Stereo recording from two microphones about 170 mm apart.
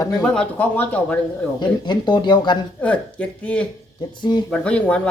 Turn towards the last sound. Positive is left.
turn(degrees=5)  # may be behind; listen again after turning